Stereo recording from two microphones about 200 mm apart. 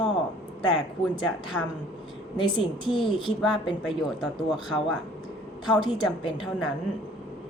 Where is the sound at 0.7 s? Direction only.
5° left (ahead or behind).